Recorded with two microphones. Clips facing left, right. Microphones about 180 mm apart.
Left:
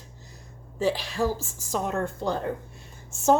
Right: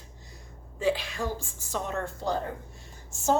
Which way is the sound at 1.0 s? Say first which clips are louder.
Left 6 dB; 35° left (ahead or behind).